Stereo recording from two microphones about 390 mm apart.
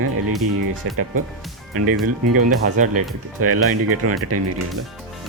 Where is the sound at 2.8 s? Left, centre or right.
Centre.